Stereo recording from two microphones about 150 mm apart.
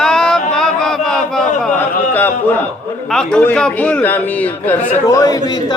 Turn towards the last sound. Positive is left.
turn(degrees=25)  # may be behind; listen again after turning